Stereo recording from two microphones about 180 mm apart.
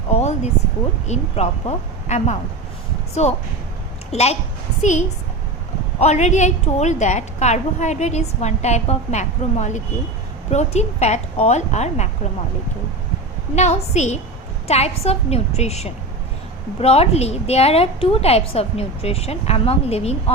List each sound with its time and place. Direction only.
0.1 s a woman's voice: 40° left (ahead or behind)
13.6 s a woman's voice: 40° left (ahead or behind)